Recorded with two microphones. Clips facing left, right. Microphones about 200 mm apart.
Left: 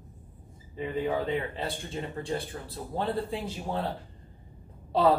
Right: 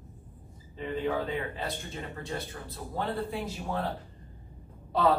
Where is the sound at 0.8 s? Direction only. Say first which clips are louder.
Left 1 dB; 15° left (ahead or behind).